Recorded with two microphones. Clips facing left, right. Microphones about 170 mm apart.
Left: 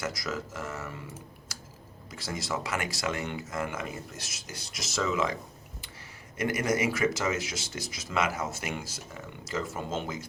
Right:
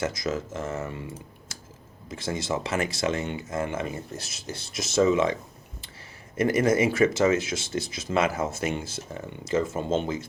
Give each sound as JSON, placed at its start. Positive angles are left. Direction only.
{"t": 0.0, "sound": "speech", "side_deg": -25}